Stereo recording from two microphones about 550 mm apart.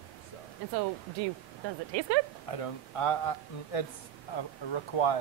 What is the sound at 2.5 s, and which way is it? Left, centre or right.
Speech, left.